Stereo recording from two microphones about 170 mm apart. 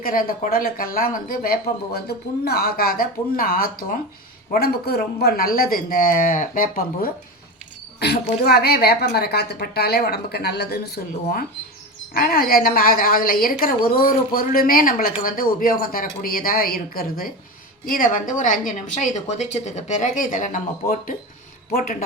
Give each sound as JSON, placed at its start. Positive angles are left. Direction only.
{"t": 0.0, "sound": "a woman's voice", "side_deg": 60}
{"t": 7.9, "sound": "a woman's voice", "side_deg": 70}
{"t": 21.7, "sound": "a woman's voice", "side_deg": 60}